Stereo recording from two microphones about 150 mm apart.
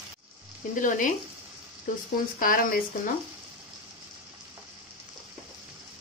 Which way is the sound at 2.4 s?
70° left (ahead or behind).